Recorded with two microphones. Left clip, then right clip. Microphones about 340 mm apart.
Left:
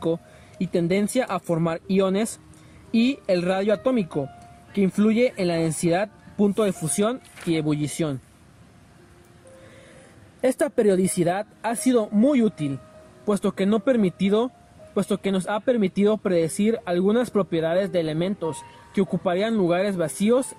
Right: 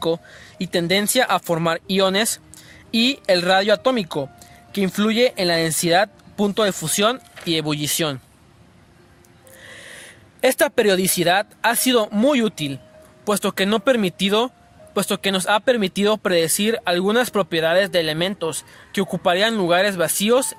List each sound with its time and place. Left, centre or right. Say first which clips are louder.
0.6 s speech: right 4 dB; right
10.4 s speech: right 4 dB; right